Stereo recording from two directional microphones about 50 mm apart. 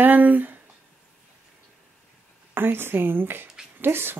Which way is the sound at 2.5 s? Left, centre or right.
Right.